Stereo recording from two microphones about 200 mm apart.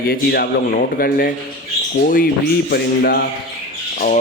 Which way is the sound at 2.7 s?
50° left (ahead or behind).